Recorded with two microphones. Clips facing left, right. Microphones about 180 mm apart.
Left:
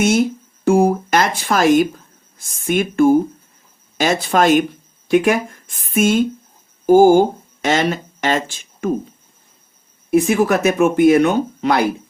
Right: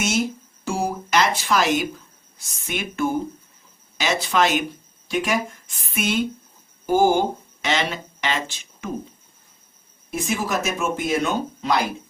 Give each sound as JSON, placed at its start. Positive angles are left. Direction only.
{"t": 0.6, "sound": "a woman's voice", "side_deg": 55}
{"t": 10.1, "sound": "speech", "side_deg": 60}